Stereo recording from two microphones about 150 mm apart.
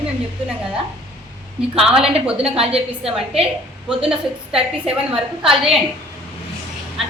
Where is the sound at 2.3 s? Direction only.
40° right (ahead or behind).